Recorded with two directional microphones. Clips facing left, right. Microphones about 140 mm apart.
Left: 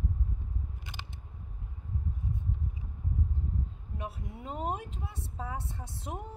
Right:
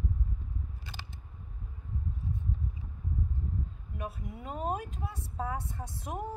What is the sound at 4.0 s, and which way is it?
A woman's voice, 25° left (ahead or behind).